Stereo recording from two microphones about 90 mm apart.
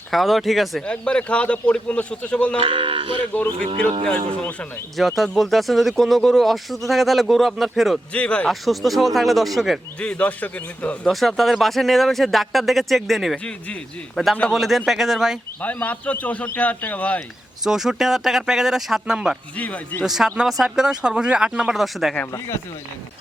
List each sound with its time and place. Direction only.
0.1 s speech: centre (ahead or behind)
0.9 s a man's voice: 10° left (ahead or behind)
2.6 s speech: 90° right
4.9 s speech: centre (ahead or behind)
8.1 s a man's voice: 15° left (ahead or behind)
8.4 s speech: centre (ahead or behind)
10.0 s a man's voice: 15° left (ahead or behind)
11.0 s speech: centre (ahead or behind)
14.4 s speech: centre (ahead or behind)
15.6 s a man's voice: 15° left (ahead or behind)
17.2 s speech: 5° right (ahead or behind)
19.5 s a man's voice: 15° left (ahead or behind)
20.0 s speech: 5° right (ahead or behind)